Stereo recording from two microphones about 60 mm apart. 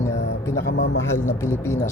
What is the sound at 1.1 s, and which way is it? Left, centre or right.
Speech, left.